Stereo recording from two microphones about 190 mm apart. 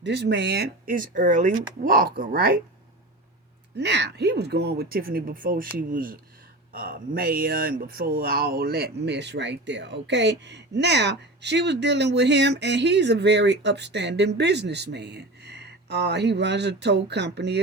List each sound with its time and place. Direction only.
0.0 s speech: 65° right (ahead or behind); by 2.6 s 50° right (ahead or behind)
3.8 s speech: 65° right (ahead or behind)